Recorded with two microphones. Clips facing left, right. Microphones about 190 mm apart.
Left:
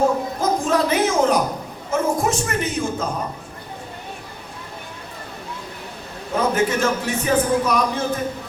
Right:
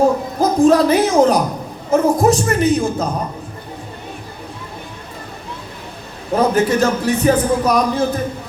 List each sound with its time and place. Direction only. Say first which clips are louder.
0.3 s speech: right 8 dB; 35° right (ahead or behind)
6.3 s speech: right 5 dB; 35° right (ahead or behind)